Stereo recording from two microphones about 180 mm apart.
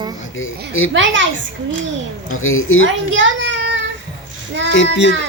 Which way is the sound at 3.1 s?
90° right.